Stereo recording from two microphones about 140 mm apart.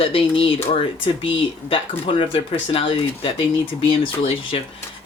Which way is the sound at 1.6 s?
40° left (ahead or behind).